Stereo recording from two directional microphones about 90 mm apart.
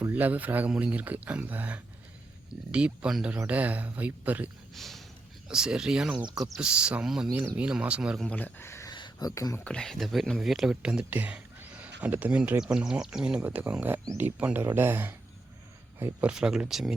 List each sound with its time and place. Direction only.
0.1 s speech: 20° right (ahead or behind)
4.7 s speech: centre (ahead or behind)
5.5 s speech: 10° right (ahead or behind)
8.2 s speech: 15° left (ahead or behind)
8.9 s a sound: 55° left (ahead or behind); by 9.6 s 40° left (ahead or behind)
9.6 s speech: 10° left (ahead or behind); by 12.4 s 20° right (ahead or behind)
12.5 s speech: 10° right (ahead or behind)
16.2 s speech: 10° right (ahead or behind)